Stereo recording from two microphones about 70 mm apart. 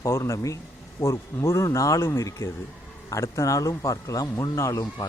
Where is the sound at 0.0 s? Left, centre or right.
Left.